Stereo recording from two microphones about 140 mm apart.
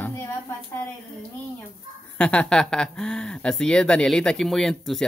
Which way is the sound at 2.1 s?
10° left (ahead or behind).